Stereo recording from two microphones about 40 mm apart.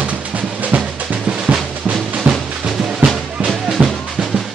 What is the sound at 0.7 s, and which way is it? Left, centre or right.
Drum, right.